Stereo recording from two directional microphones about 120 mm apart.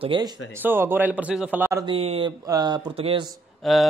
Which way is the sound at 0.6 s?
15° right (ahead or behind).